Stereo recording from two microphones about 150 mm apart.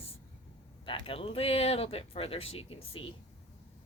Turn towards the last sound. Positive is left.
turn(degrees=40)  # may be behind; listen again after turning